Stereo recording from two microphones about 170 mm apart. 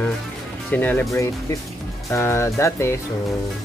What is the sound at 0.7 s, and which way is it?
Speech, 10° left (ahead or behind).